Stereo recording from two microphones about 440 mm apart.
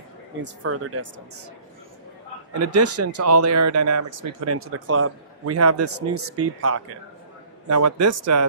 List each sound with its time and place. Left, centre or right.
0.4 s speech: right
2.6 s speech: right